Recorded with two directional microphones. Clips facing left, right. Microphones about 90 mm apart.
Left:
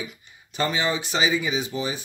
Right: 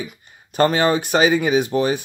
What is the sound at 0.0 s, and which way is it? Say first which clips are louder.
Speech: right 4 dB; 50° right (ahead or behind).